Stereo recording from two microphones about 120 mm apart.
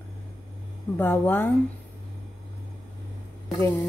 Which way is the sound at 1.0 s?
15° left (ahead or behind).